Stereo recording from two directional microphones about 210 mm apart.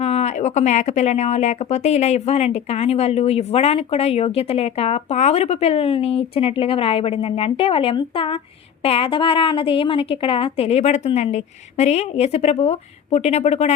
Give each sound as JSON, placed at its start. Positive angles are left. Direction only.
{"t": 0.0, "sound": "a woman's voice", "side_deg": 30}